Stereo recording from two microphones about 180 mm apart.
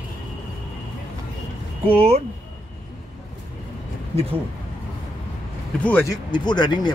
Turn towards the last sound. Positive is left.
turn(degrees=25)  # may be behind; listen again after turning